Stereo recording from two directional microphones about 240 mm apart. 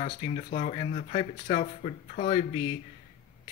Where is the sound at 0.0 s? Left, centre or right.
Left.